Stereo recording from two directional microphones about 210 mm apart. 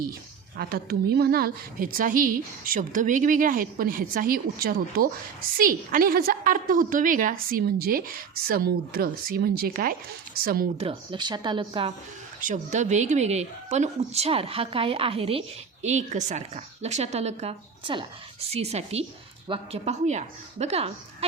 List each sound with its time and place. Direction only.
0.5 s a woman's voice: 45° right (ahead or behind)
10.8 s speech: 25° right (ahead or behind)
12.4 s a woman's voice: 35° right (ahead or behind)